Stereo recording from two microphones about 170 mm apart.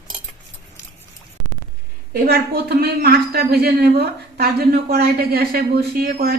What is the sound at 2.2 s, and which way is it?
Speech, 70° right (ahead or behind).